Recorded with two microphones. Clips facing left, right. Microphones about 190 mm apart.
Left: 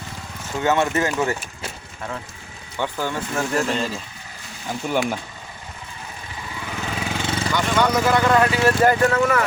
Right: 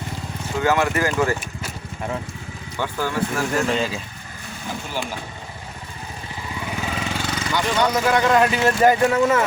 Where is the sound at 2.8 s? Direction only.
15° left (ahead or behind).